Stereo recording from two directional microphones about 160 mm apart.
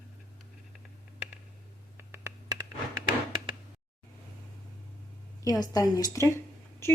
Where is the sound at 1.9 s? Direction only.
15° right (ahead or behind).